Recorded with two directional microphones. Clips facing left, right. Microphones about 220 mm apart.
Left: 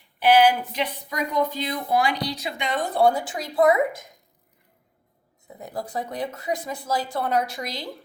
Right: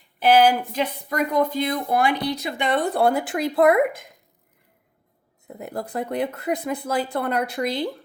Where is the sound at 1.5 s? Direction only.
50° right (ahead or behind).